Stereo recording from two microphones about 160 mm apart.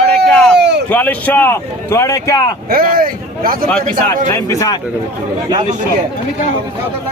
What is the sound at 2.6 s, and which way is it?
Speech, 65° right (ahead or behind).